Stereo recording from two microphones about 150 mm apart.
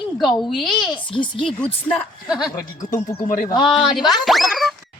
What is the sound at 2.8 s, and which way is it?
Speech, 20° left (ahead or behind).